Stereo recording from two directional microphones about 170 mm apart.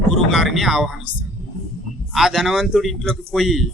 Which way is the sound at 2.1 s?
Centre (ahead or behind).